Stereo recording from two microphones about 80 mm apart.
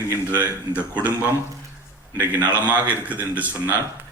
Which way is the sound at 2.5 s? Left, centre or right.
Centre.